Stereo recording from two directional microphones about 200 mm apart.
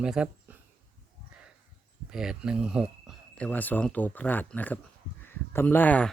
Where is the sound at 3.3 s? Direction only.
5° left (ahead or behind).